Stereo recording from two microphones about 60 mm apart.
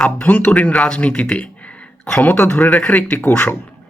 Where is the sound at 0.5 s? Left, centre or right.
Centre.